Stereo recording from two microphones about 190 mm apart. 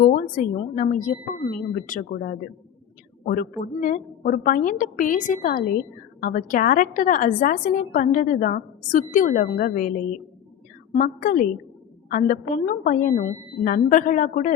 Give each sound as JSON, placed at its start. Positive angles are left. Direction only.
{"t": 0.0, "sound": "a woman's voice", "side_deg": 45}
{"t": 10.9, "sound": "a woman's voice", "side_deg": 45}